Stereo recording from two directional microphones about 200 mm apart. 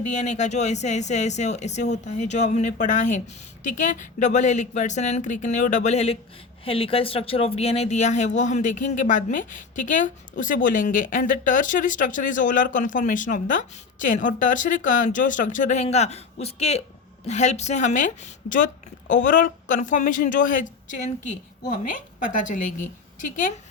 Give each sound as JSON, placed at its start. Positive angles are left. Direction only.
{"t": 0.1, "sound": "speech", "side_deg": 35}